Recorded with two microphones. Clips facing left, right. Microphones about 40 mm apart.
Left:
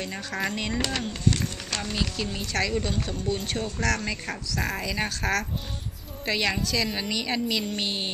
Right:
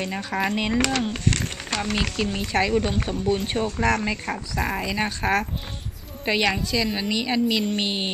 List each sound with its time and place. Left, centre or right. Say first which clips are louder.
0.0 s a woman's voice: right 4 dB; centre
0.7 s speech: right 6 dB; right
1.1 s speech: right 1 dB; right
2.0 s a woman's voice: right 4 dB; right